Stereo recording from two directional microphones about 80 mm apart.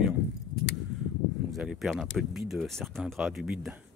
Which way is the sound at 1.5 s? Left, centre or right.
Centre.